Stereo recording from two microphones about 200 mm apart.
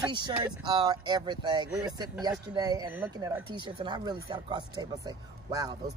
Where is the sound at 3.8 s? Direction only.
20° right (ahead or behind).